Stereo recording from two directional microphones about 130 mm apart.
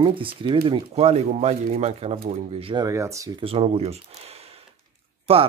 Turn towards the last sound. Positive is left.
turn(degrees=-50)  # may be behind; listen again after turning